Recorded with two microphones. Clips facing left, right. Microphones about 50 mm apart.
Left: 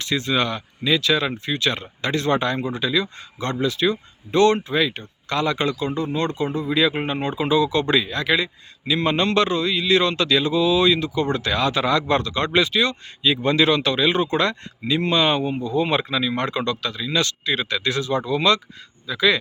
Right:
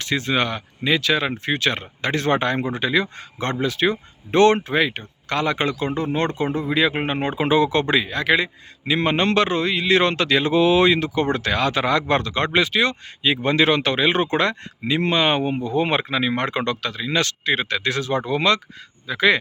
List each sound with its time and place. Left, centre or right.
0.0 s speech: right
1.5 s a man's voice: right